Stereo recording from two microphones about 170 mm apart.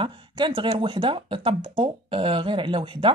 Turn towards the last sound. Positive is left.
turn(degrees=-30)  # may be behind; listen again after turning